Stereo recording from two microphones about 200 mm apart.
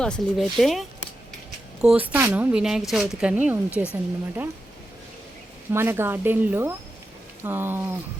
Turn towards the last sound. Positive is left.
turn(degrees=-10)  # may be behind; listen again after turning